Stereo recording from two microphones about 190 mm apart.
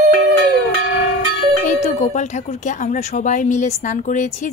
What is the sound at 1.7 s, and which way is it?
Speech, 35° left (ahead or behind).